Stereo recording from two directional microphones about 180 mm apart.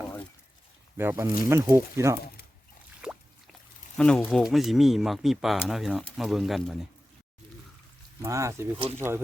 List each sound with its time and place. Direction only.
0.9 s speech: 15° right (ahead or behind)
3.0 s a sound: 5° right (ahead or behind)
3.9 s speech: 5° left (ahead or behind)
8.2 s speech: 15° right (ahead or behind)